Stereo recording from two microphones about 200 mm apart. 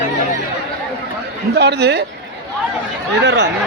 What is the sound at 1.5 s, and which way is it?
Speech, 55° right (ahead or behind).